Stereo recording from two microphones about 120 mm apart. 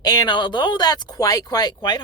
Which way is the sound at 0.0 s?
35° left (ahead or behind).